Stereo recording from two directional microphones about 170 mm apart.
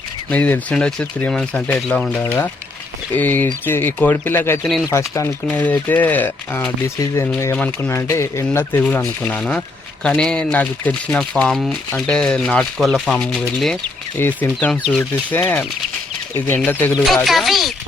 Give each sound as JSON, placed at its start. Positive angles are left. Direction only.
{"t": 0.3, "sound": "speech", "side_deg": 10}
{"t": 17.2, "sound": "speech", "side_deg": 0}